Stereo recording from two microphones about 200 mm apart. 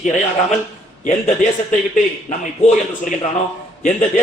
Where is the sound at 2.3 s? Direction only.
40° left (ahead or behind).